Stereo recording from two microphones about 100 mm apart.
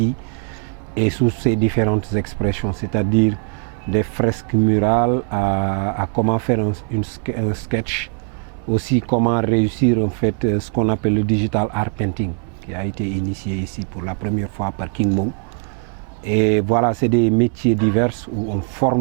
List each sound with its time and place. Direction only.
0.9 s speech: 15° right (ahead or behind)
14.0 s speech: 15° right (ahead or behind)